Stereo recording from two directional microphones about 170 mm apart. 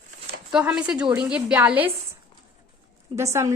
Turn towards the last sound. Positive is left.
turn(degrees=-15)  # may be behind; listen again after turning